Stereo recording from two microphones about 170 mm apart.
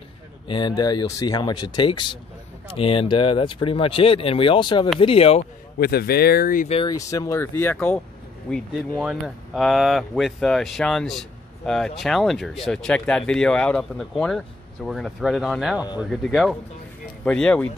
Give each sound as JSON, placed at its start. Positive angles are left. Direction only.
{"t": 0.5, "sound": "speech", "side_deg": 25}
{"t": 5.8, "sound": "speech", "side_deg": 65}
{"t": 6.7, "sound": "speech", "side_deg": 30}
{"t": 7.0, "sound": "speech", "side_deg": 20}